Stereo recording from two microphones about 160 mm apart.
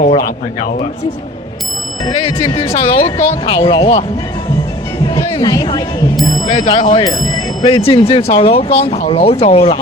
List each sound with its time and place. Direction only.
2.0 s speech: 25° left (ahead or behind)
5.0 s speech: 25° left (ahead or behind)